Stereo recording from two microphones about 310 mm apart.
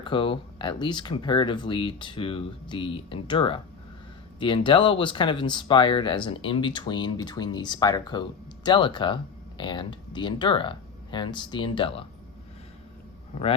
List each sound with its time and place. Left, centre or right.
0.0 s speech: centre